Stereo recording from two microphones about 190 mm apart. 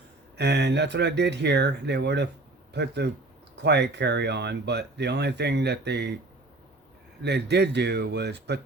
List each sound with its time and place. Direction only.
0.3 s speech: 65° right (ahead or behind)
7.2 s speech: 60° right (ahead or behind)